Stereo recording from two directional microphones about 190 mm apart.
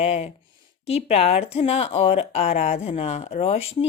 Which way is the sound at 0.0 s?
35° left (ahead or behind).